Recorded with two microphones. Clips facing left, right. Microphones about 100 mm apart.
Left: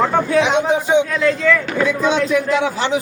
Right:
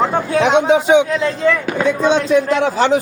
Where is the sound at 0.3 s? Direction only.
60° right (ahead or behind).